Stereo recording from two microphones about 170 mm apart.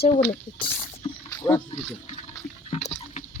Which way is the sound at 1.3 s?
15° left (ahead or behind).